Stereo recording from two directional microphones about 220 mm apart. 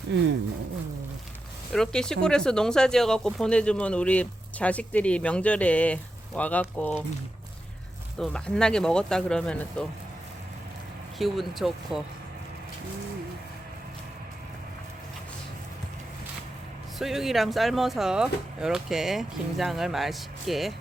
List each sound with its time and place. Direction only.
0.1 s speech: 50° right (ahead or behind)
1.7 s speech: 5° left (ahead or behind)
8.2 s speech: 5° left (ahead or behind)
11.2 s speech: centre (ahead or behind)
17.0 s speech: centre (ahead or behind)